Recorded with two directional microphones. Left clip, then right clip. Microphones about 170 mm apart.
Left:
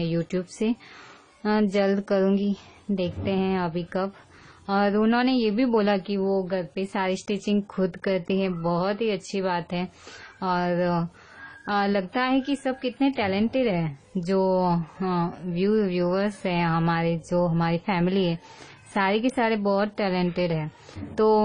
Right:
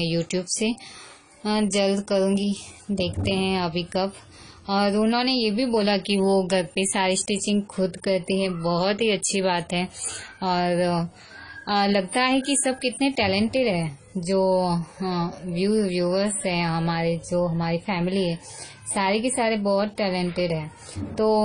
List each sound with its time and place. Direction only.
0.0 s speech: 25° left (ahead or behind)
6.1 s a woman's voice: centre (ahead or behind); by 21.4 s 30° left (ahead or behind)